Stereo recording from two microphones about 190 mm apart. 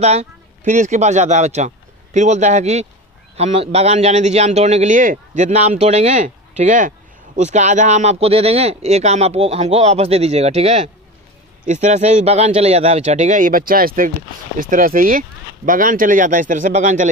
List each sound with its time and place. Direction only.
0.0 s a man's voice: 35° right (ahead or behind)